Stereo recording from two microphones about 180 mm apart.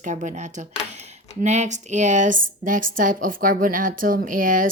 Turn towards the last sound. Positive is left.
turn(degrees=-50)  # may be behind; listen again after turning